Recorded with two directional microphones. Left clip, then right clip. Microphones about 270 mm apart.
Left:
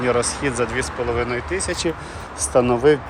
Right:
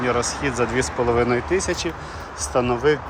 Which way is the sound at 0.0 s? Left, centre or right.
Centre.